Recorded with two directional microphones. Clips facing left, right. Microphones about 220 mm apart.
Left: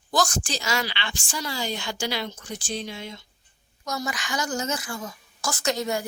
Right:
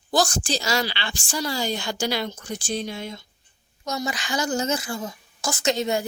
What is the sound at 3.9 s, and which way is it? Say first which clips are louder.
A woman's voice: right 2 dB; 25° right (ahead or behind).